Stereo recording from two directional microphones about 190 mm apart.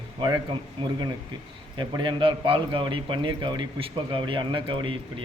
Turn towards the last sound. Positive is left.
turn(degrees=-25)  # may be behind; listen again after turning